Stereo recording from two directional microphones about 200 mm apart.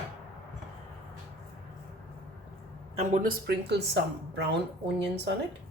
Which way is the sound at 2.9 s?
35° right (ahead or behind).